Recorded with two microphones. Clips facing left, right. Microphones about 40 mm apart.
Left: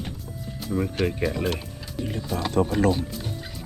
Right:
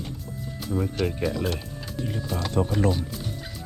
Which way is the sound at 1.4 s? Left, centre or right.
Centre.